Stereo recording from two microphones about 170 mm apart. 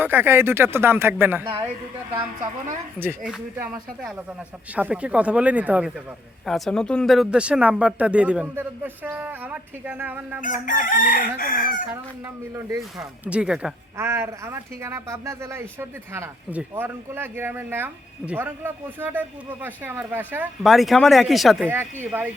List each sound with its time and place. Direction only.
0.0 s speech: 10° right (ahead or behind)
3.0 s speech: 15° right (ahead or behind)
3.3 s speech: centre (ahead or behind)
6.4 s speech: 5° left (ahead or behind)
10.4 s chicken: 50° left (ahead or behind)
13.0 s speech: 5° right (ahead or behind)
13.9 s speech: 15° right (ahead or behind)
20.7 s speech: centre (ahead or behind)
21.7 s speech: 10° right (ahead or behind)